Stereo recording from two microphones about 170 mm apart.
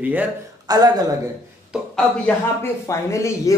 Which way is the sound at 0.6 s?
25° right (ahead or behind).